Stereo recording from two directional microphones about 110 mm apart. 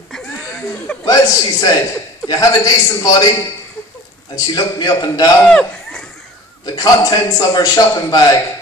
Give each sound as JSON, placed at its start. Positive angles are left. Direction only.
{"t": 0.1, "sound": "a sound", "side_deg": 5}
{"t": 1.0, "sound": "a man's voice", "side_deg": 35}
{"t": 4.6, "sound": "a man's voice", "side_deg": 40}
{"t": 5.5, "sound": "speech", "side_deg": 10}
{"t": 6.6, "sound": "a man's voice", "side_deg": 35}